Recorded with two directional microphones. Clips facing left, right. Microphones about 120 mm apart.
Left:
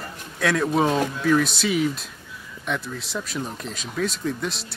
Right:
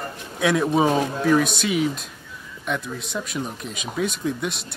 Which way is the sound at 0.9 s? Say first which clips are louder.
Right 1 dB; 40° right (ahead or behind).